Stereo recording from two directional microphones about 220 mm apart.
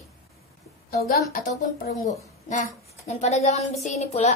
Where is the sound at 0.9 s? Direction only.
40° left (ahead or behind).